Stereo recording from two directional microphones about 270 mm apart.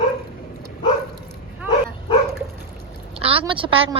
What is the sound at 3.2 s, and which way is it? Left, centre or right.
Speech, right.